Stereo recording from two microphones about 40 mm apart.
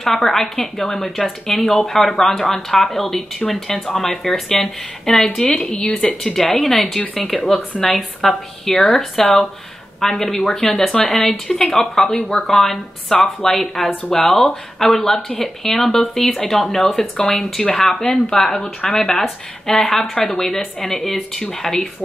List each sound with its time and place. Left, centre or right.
0.0 s a woman's voice: centre
5.4 s speech: left
6.2 s a woman's voice: centre
11.4 s speech: centre
18.3 s speech: left
19.2 s speech: centre